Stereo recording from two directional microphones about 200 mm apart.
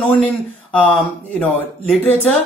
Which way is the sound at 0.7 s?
5° left (ahead or behind).